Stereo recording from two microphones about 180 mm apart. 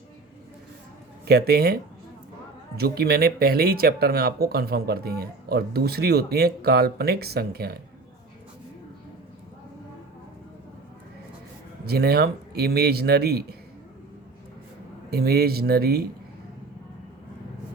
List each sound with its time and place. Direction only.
1.3 s speech: 60° right (ahead or behind)
11.9 s speech: 60° right (ahead or behind)
15.1 s speech: 60° right (ahead or behind)